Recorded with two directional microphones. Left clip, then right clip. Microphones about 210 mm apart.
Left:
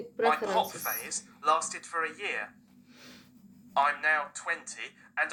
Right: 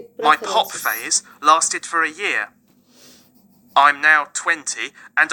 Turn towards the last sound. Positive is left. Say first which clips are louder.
# right 14 dB
turn(degrees=-45)  # may be behind; listen again after turning